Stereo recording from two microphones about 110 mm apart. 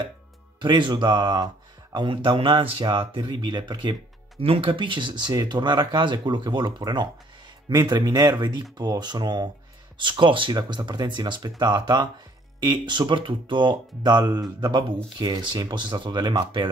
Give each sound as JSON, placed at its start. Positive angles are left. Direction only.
{"t": 0.6, "sound": "speech", "side_deg": -45}
{"t": 4.4, "sound": "speech", "side_deg": -60}